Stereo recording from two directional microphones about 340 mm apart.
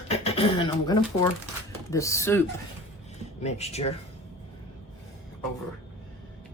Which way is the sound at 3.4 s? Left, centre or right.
Centre.